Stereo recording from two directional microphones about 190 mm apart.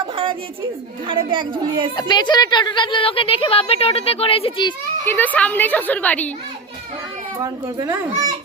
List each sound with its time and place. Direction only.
1.0 s speech: 25° right (ahead or behind)
2.0 s a woman's voice: 20° left (ahead or behind)
5.0 s a woman's voice: 10° left (ahead or behind)
7.3 s speech: 20° right (ahead or behind)